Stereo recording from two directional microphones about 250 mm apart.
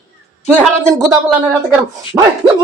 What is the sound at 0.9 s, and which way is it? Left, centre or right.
Speech, centre.